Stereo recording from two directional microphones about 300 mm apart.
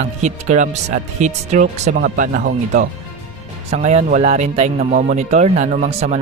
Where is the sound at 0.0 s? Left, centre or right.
Right.